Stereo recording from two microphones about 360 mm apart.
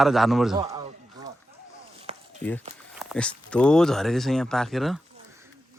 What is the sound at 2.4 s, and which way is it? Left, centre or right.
Speech, centre.